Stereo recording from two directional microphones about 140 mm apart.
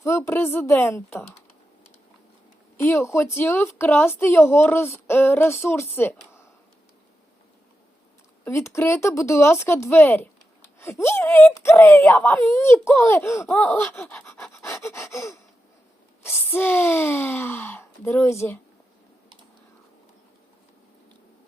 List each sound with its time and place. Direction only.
0.0 s a woman's voice: 20° left (ahead or behind)
2.7 s a woman's voice: 15° left (ahead or behind)
8.4 s a woman's voice: 20° left (ahead or behind)
14.5 s gasp: 20° left (ahead or behind)
16.2 s a woman's voice: 15° left (ahead or behind)